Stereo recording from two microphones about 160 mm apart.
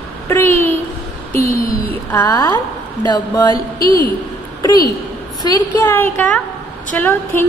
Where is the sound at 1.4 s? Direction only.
65° left (ahead or behind).